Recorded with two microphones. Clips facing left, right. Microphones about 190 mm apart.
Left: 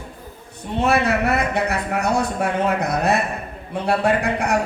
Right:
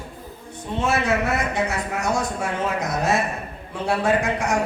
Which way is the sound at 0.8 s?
60° left (ahead or behind).